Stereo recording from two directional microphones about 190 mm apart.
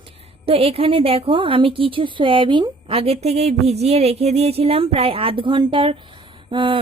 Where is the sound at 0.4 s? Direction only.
30° right (ahead or behind).